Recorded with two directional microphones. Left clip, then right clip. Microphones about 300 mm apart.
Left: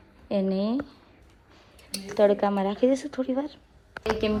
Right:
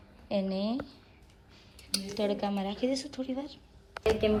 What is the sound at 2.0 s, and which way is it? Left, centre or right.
A woman's voice, centre.